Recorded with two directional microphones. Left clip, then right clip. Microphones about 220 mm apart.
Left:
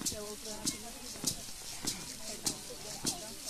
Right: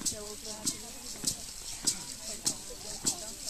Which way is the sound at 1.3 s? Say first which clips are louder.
Right 2 dB; 10° right (ahead or behind).